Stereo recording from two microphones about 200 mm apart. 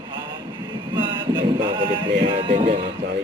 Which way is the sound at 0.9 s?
20° right (ahead or behind).